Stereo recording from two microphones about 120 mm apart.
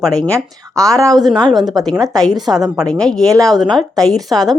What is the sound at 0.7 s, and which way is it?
Speech, 25° right (ahead or behind).